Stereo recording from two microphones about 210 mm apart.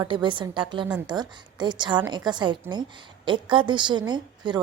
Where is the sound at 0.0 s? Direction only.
20° right (ahead or behind).